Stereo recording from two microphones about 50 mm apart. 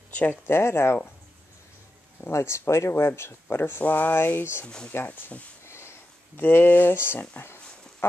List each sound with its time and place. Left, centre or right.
0.3 s speech: left
2.3 s speech: left
2.9 s speech: left
3.4 s speech: left
3.8 s speech: left
4.1 s speech: left
4.6 s speech: centre
5.0 s speech: left
5.7 s sniff: left
6.3 s speech: left